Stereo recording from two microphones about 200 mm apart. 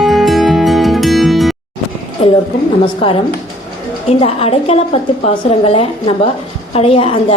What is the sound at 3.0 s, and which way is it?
A woman's voice, 25° left (ahead or behind).